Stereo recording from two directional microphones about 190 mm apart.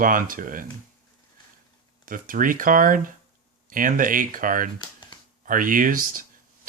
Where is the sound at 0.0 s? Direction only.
45° right (ahead or behind).